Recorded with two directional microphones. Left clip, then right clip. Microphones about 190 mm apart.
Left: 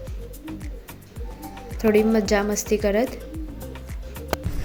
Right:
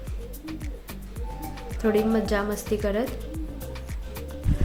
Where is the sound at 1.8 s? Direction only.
20° left (ahead or behind).